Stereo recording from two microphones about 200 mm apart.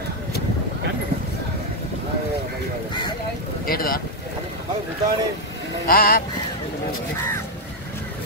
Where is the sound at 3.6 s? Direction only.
45° left (ahead or behind).